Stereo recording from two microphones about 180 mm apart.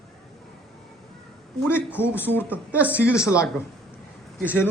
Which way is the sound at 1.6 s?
10° left (ahead or behind).